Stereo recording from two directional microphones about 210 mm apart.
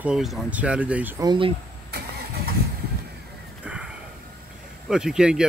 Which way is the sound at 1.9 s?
50° right (ahead or behind).